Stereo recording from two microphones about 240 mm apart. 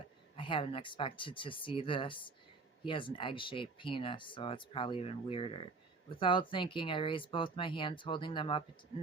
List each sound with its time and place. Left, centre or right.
0.3 s speech: left